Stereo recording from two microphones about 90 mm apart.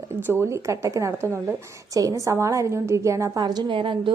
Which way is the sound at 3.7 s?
70° right (ahead or behind).